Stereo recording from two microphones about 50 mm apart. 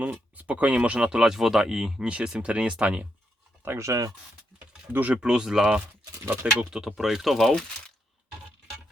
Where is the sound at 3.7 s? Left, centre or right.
Right.